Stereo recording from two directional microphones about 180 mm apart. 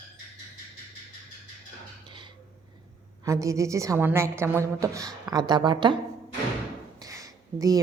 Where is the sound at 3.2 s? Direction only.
15° right (ahead or behind).